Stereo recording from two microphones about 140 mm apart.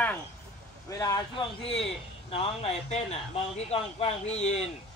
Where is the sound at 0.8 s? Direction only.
25° left (ahead or behind).